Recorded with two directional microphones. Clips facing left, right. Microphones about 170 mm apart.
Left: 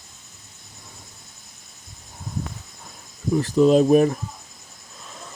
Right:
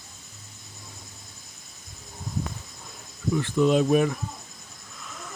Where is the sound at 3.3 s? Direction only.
35° left (ahead or behind).